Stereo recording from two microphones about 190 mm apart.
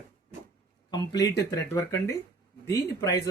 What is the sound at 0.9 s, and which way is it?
Speech, 20° left (ahead or behind).